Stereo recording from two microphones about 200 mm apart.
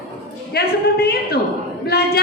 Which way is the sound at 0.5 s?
50° left (ahead or behind).